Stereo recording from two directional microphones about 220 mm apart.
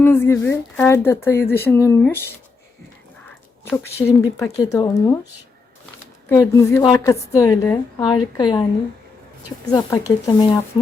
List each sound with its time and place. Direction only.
0.0 s speech: 10° left (ahead or behind)
3.7 s speech: 10° left (ahead or behind)
6.2 s speech: 15° left (ahead or behind)
9.7 s speech: 15° left (ahead or behind)